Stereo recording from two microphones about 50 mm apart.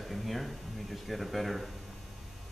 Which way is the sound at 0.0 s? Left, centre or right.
Centre.